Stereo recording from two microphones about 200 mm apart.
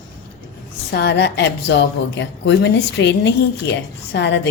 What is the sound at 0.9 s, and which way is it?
A woman's voice, 60° left (ahead or behind).